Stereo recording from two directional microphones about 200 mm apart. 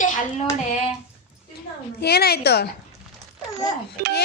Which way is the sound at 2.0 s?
55° left (ahead or behind).